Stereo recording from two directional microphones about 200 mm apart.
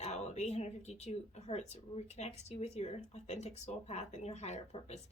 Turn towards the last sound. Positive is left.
turn(degrees=35)  # may be behind; listen again after turning